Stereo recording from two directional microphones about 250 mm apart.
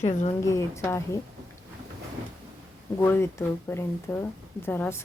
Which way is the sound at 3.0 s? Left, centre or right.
Centre.